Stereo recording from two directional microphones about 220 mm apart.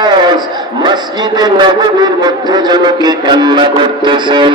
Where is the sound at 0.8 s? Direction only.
20° right (ahead or behind).